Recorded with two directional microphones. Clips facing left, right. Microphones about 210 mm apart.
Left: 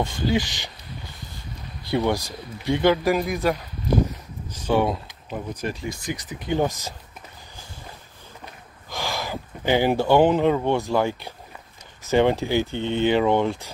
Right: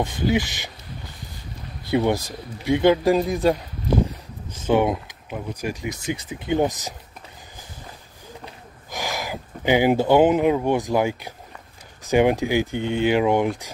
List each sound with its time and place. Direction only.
0.0 s speech: 20° right (ahead or behind)
1.9 s speech: 20° right (ahead or behind)
4.6 s speech: 20° right (ahead or behind)
8.9 s speech: 15° right (ahead or behind)